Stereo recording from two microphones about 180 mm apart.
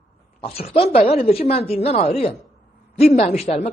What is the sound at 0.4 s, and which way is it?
Chopping, 35° left (ahead or behind).